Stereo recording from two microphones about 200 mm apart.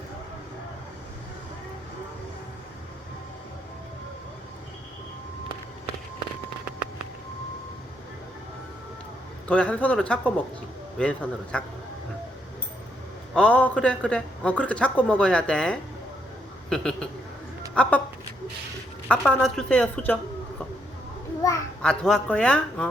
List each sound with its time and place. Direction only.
9.5 s speech: 5° left (ahead or behind)
13.3 s speech: 5° left (ahead or behind)
19.0 s speech: 5° left (ahead or behind)
21.4 s speech: 15° left (ahead or behind)
21.8 s speech: 5° left (ahead or behind)